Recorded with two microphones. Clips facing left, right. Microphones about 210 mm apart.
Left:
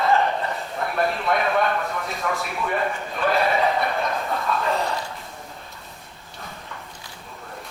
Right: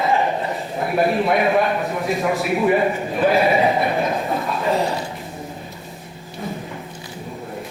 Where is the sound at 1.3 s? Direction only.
10° right (ahead or behind).